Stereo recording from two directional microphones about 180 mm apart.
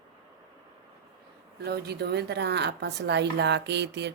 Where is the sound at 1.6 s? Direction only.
65° right (ahead or behind).